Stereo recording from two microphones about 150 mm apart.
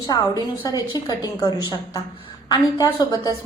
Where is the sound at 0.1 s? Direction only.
25° left (ahead or behind).